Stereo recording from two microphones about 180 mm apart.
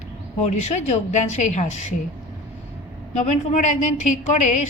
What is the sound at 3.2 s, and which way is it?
A woman's voice, 40° left (ahead or behind).